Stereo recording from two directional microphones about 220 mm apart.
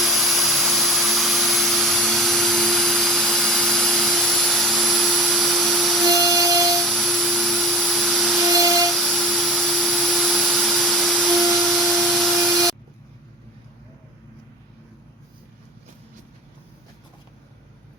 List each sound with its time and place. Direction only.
0.0 s vacuum cleaner: centre (ahead or behind)
6.3 s music: 15° right (ahead or behind)
6.7 s vacuum cleaner: centre (ahead or behind)
8.4 s a sound: 15° right (ahead or behind)
8.9 s vacuum cleaner: centre (ahead or behind)